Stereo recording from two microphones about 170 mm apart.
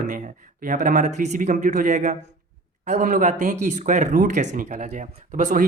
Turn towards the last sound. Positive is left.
turn(degrees=-50)  # may be behind; listen again after turning